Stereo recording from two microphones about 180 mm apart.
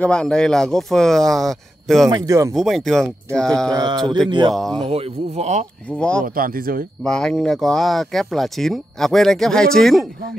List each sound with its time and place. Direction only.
0.0 s speech: 5° left (ahead or behind)
2.0 s speech: 20° right (ahead or behind)
2.5 s speech: centre (ahead or behind)
3.7 s a sound: 25° right (ahead or behind)
4.6 s speech: centre (ahead or behind)
4.8 s speech: 35° right (ahead or behind)
5.9 s speech: 5° left (ahead or behind)
6.2 s speech: 50° right (ahead or behind)
7.1 s speech: 5° left (ahead or behind)